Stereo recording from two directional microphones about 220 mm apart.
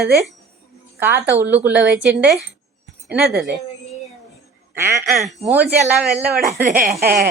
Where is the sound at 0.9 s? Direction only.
10° right (ahead or behind).